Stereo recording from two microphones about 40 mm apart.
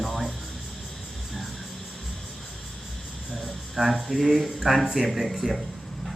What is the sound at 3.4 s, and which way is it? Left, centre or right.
Cricket, centre.